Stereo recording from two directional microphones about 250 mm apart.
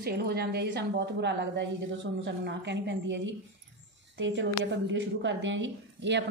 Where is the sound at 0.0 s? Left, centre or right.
Right.